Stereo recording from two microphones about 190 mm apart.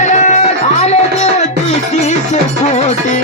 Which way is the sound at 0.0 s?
40° left (ahead or behind).